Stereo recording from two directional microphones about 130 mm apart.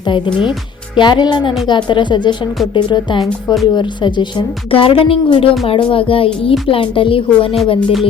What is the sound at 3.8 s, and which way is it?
A woman's voice, 35° left (ahead or behind).